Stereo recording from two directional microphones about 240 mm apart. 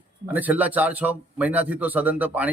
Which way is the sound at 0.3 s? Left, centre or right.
Centre.